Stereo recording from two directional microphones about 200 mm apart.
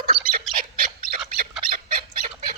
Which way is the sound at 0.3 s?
45° right (ahead or behind).